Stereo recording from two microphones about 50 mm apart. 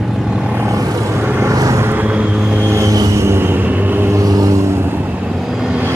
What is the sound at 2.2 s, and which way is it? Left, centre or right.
Vehicle, right.